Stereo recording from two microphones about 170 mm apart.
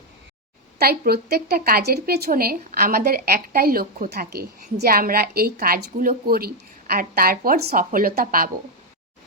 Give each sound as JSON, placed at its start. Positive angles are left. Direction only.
{"t": 0.8, "sound": "a woman's voice", "side_deg": -65}